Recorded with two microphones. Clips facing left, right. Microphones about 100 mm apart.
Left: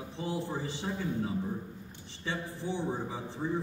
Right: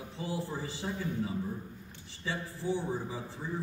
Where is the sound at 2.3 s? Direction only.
20° left (ahead or behind).